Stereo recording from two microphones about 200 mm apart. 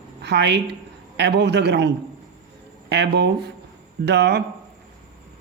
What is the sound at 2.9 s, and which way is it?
Speech, 60° right (ahead or behind).